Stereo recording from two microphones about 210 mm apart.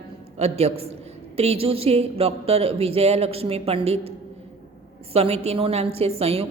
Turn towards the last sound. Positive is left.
turn(degrees=-30)  # may be behind; listen again after turning